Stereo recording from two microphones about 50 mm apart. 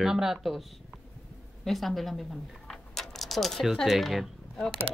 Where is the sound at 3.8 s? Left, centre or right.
Centre.